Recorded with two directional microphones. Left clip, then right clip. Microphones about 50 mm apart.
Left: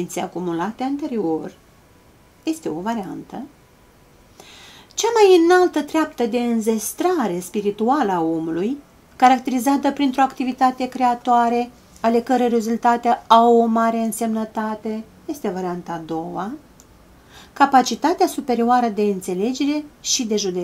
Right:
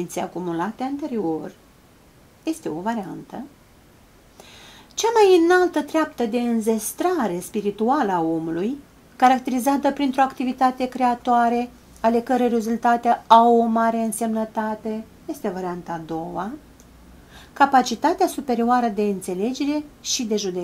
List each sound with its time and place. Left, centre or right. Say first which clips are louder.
0.0 s speech: left 2 dB; left